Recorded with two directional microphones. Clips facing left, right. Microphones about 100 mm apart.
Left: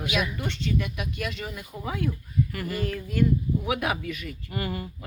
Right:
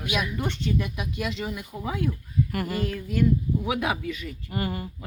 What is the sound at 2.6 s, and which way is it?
Speech, 20° right (ahead or behind).